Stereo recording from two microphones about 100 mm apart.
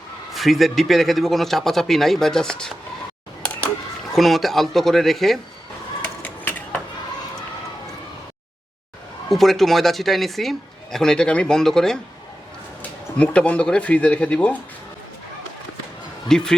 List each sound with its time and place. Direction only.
0.3 s speech: centre (ahead or behind)
3.4 s a sound: 10° left (ahead or behind)
4.1 s speech: centre (ahead or behind)
6.2 s a sound: 15° left (ahead or behind)
9.3 s speech: centre (ahead or behind)
13.1 s speech: 15° left (ahead or behind)
16.3 s speech: 5° left (ahead or behind)